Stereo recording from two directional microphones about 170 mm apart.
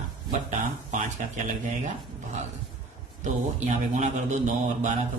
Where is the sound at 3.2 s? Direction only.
45° right (ahead or behind).